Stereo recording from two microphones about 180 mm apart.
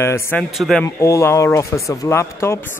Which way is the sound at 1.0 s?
15° left (ahead or behind).